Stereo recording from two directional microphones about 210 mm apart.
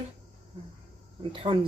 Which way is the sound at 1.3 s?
25° right (ahead or behind).